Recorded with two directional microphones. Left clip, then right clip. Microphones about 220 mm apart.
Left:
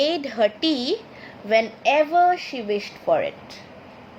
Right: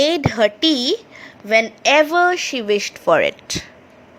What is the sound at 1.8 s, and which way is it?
Speech, 40° right (ahead or behind).